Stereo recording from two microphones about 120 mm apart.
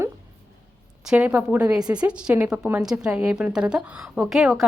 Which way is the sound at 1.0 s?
10° right (ahead or behind).